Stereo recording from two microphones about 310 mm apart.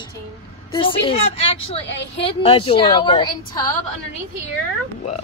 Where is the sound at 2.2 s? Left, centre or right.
Centre.